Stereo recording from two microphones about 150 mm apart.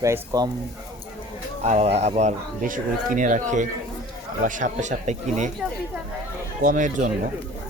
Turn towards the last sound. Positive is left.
turn(degrees=-60)  # may be behind; listen again after turning